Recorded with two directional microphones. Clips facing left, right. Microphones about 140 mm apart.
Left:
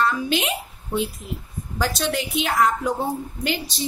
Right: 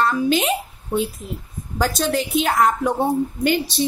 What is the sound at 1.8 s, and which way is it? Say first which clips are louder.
A woman's voice: right 3 dB; 45° right (ahead or behind).